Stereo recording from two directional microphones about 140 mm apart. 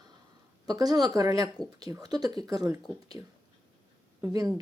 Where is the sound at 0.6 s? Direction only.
30° right (ahead or behind).